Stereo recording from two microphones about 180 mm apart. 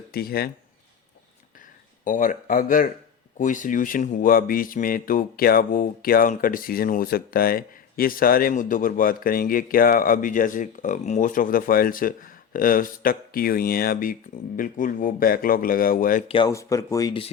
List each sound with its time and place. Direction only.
0.1 s speech: 60° left (ahead or behind)
2.0 s speech: 45° left (ahead or behind)
16.5 s speech: 15° left (ahead or behind)